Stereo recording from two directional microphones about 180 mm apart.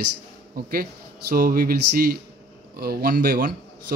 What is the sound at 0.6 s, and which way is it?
A man's voice, 55° right (ahead or behind).